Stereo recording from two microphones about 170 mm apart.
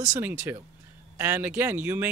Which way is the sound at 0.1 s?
10° right (ahead or behind).